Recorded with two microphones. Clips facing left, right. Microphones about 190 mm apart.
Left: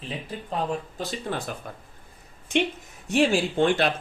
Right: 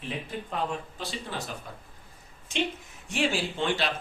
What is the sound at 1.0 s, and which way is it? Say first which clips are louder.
Speech: left 5 dB; 45° left (ahead or behind).